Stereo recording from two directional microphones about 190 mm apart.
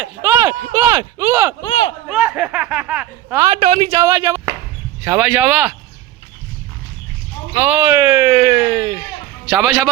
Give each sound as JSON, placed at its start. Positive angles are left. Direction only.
{"t": 0.0, "sound": "speech", "side_deg": -10}
{"t": 2.0, "sound": "speech", "side_deg": -5}
{"t": 3.4, "sound": "speech", "side_deg": -30}
{"t": 7.5, "sound": "speech", "side_deg": -10}
{"t": 9.5, "sound": "speech", "side_deg": 0}